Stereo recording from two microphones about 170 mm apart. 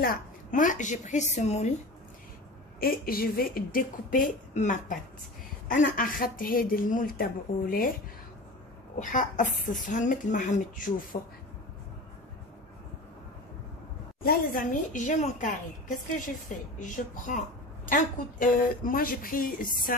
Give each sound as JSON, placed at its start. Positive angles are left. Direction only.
{"t": 0.0, "sound": "a woman's voice", "side_deg": 55}
{"t": 2.8, "sound": "speech", "side_deg": 60}
{"t": 9.0, "sound": "a woman's voice", "side_deg": 50}
{"t": 14.2, "sound": "a woman's voice", "side_deg": 50}